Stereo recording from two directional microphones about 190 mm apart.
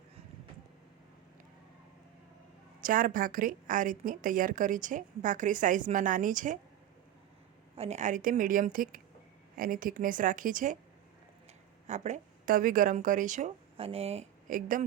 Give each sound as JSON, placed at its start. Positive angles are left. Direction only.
{"t": 2.8, "sound": "a woman's voice", "side_deg": -45}
{"t": 7.8, "sound": "a woman's voice", "side_deg": -35}
{"t": 11.9, "sound": "speech", "side_deg": -40}